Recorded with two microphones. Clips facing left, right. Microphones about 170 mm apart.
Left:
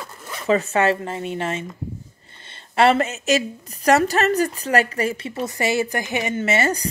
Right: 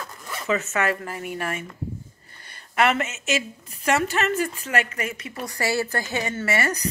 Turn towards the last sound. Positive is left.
turn(degrees=30)  # may be behind; listen again after turning